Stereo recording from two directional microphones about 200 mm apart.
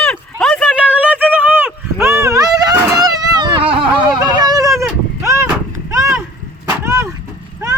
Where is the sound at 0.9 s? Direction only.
10° right (ahead or behind).